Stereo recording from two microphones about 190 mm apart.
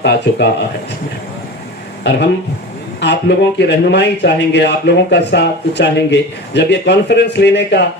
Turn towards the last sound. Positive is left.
turn(degrees=60)  # may be behind; listen again after turning